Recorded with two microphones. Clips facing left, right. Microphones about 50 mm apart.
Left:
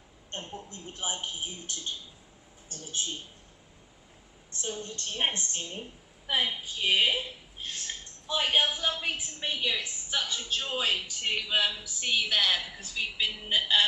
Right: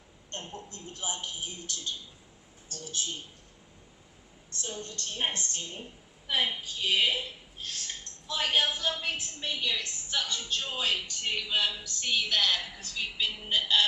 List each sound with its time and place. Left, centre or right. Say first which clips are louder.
0.3 s a man's voice: left 1 dB; left
4.8 s a man's voice: left 2 dB; left
8.3 s a woman's voice: left 1 dB; centre